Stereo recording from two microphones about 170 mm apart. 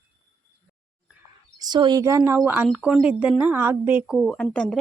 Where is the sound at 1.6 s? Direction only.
25° right (ahead or behind).